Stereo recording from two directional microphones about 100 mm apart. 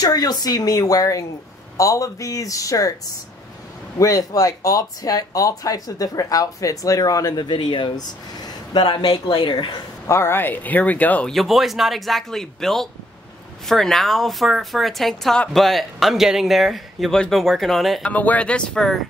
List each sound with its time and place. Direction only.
0.0 s speech: 40° left (ahead or behind)
4.0 s speech: 35° left (ahead or behind); by 9.7 s 55° left (ahead or behind)
10.0 s speech: 25° left (ahead or behind)
11.3 s speech: centre (ahead or behind)
18.0 s speech: 15° left (ahead or behind)